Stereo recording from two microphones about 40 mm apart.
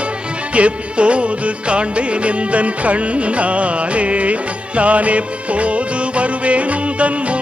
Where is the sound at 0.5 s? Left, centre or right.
Right.